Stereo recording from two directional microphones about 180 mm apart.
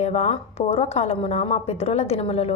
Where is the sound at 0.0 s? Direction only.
35° left (ahead or behind).